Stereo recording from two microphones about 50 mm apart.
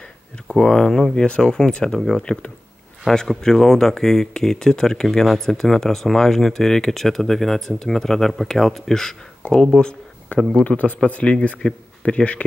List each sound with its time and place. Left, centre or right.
0.6 s speech: centre
2.0 s a man's voice: centre; by 12.4 s left